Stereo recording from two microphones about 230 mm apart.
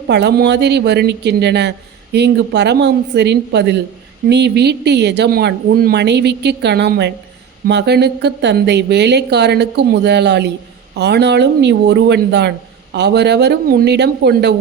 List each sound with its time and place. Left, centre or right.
0.1 s speech: right